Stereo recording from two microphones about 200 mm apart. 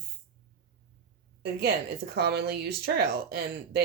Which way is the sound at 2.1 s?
55° right (ahead or behind).